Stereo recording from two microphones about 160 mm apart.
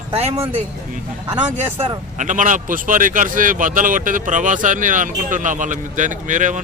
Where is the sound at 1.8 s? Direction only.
50° right (ahead or behind).